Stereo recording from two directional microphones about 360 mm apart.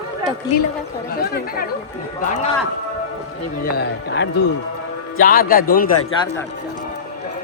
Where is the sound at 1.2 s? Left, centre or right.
Left.